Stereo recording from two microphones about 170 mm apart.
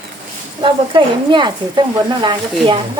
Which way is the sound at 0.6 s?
30° right (ahead or behind).